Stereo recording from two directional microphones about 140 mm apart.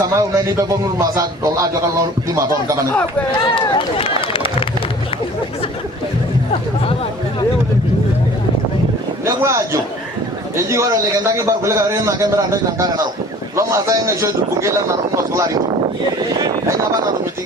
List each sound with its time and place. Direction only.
0.0 s a man's voice: 25° right (ahead or behind)
3.3 s speech: 35° left (ahead or behind)
9.2 s a man's voice: 20° right (ahead or behind)